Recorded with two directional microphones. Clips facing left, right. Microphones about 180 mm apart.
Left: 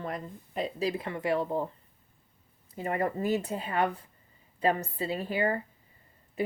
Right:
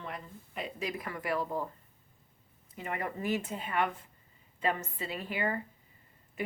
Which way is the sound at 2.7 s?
35° left (ahead or behind).